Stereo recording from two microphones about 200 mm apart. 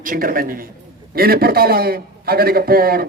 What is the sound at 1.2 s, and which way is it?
A man's voice, 50° right (ahead or behind).